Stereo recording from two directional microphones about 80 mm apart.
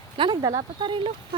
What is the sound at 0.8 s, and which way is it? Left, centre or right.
Speech, right.